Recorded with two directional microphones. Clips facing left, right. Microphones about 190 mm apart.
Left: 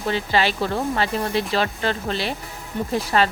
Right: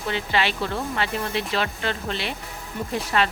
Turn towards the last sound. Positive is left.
turn(degrees=35)  # may be behind; listen again after turning